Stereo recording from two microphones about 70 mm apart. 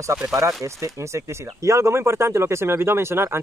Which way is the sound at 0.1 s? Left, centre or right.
Right.